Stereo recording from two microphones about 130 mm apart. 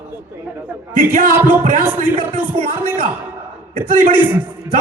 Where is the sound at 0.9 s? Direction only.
90° right.